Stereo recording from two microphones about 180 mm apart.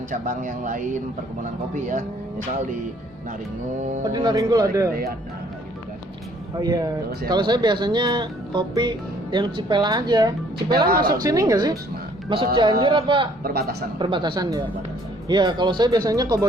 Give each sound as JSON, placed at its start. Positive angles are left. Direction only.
{"t": 0.1, "sound": "speech", "side_deg": -45}
{"t": 4.1, "sound": "speech", "side_deg": -25}
{"t": 6.6, "sound": "speech", "side_deg": -20}
{"t": 10.8, "sound": "a woman's voice", "side_deg": -60}
{"t": 11.1, "sound": "speech", "side_deg": -20}
{"t": 13.4, "sound": "a woman's voice", "side_deg": -60}
{"t": 14.0, "sound": "speech", "side_deg": -25}